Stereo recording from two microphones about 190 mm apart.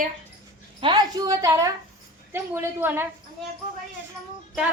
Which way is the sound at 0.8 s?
25° right (ahead or behind).